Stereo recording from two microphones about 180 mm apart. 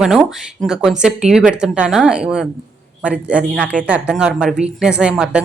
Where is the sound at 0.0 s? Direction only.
5° right (ahead or behind).